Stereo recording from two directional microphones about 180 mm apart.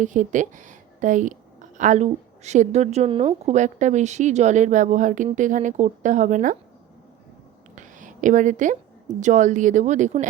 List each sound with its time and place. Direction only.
0.0 s a woman's voice: 45° right (ahead or behind)
7.8 s a woman's voice: 45° right (ahead or behind)